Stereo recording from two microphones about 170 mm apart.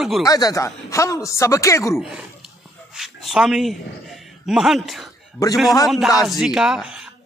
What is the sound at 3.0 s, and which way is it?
A man's voice, 5° right (ahead or behind).